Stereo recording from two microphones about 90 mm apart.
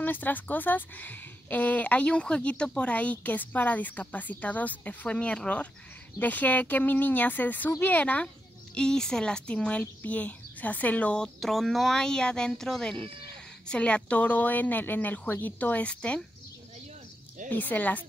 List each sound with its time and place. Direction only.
0.0 s speech: 20° left (ahead or behind)
17.5 s speech: 20° left (ahead or behind)